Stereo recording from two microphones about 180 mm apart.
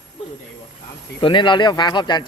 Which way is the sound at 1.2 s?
25° left (ahead or behind).